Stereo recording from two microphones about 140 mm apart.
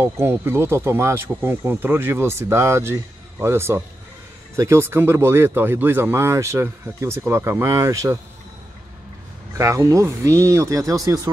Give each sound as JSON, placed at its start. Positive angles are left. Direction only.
{"t": 0.0, "sound": "speech", "side_deg": -20}
{"t": 9.6, "sound": "speech", "side_deg": -20}